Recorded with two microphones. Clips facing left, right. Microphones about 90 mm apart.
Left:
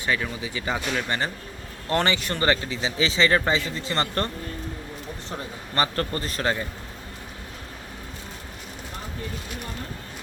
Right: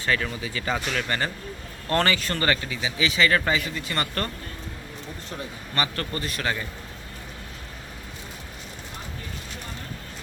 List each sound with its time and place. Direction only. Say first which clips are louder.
0.0 s speech: even; 15° left (ahead or behind)
5.7 s speech: left 3 dB; 35° left (ahead or behind)